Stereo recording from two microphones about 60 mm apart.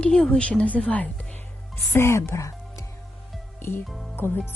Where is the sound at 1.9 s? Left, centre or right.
Left.